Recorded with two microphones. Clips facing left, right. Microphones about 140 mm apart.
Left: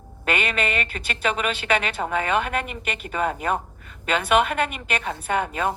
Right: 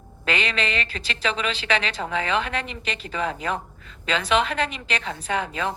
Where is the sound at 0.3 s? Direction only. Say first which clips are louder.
Left 1 dB; 55° left (ahead or behind).